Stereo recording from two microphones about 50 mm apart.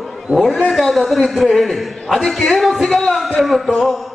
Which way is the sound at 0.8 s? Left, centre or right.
Centre.